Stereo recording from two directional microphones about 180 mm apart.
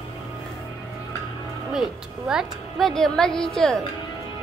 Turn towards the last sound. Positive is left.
turn(degrees=5)  # may be behind; listen again after turning